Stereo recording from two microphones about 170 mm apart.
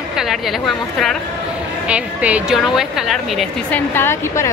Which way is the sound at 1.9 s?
5° right (ahead or behind).